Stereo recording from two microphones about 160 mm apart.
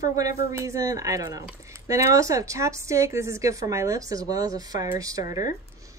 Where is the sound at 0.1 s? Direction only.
20° right (ahead or behind).